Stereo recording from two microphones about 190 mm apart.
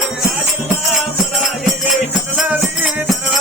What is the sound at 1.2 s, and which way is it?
Music, centre (ahead or behind).